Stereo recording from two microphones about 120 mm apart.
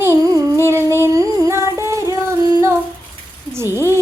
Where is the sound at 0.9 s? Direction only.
25° right (ahead or behind).